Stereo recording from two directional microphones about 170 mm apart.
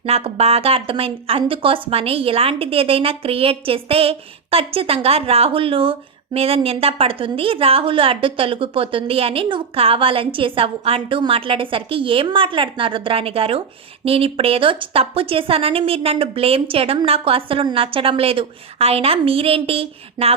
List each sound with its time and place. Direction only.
0.0 s a woman's voice: 35° right (ahead or behind)